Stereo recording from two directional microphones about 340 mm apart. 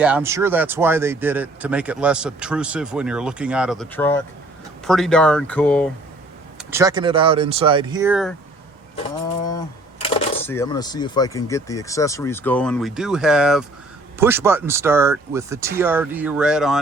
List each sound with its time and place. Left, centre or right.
0.0 s speech: centre
6.6 s speech: centre
9.4 s speech: centre